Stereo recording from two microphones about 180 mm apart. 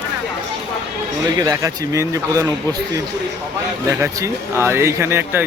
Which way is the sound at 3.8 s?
15° right (ahead or behind).